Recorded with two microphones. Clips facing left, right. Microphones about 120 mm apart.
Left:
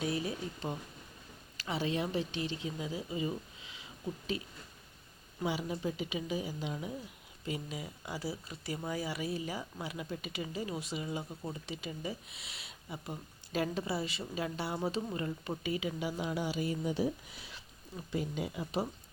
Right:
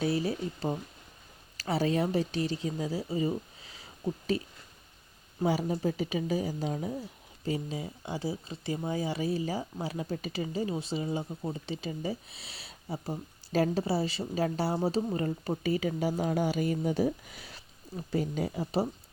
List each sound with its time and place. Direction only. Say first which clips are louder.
0.0 s speech: right 6 dB; 35° right (ahead or behind)
5.4 s speech: right 6 dB; 40° right (ahead or behind)